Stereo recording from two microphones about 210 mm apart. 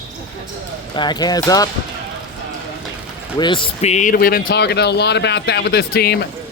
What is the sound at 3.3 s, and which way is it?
Speech, 20° left (ahead or behind).